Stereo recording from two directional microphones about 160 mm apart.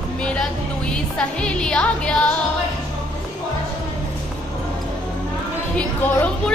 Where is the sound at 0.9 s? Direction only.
5° left (ahead or behind).